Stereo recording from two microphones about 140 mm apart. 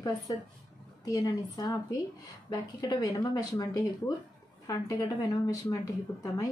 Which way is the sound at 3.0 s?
25° left (ahead or behind).